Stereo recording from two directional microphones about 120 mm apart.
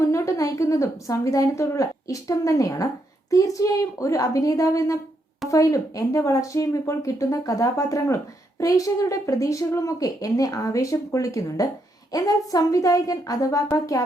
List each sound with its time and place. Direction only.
0.0 s a woman's voice: 25° left (ahead or behind)